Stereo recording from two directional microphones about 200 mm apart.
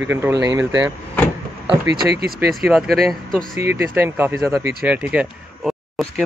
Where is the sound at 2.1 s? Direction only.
50° right (ahead or behind).